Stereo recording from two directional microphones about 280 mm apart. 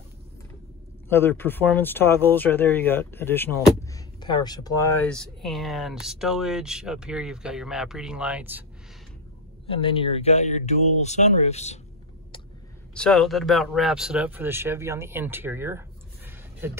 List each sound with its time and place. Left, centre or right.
1.0 s speech: centre
9.7 s speech: centre
12.9 s speech: centre
16.3 s a sound: centre